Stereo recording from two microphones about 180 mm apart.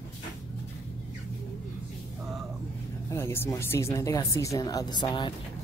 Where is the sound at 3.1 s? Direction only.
15° left (ahead or behind).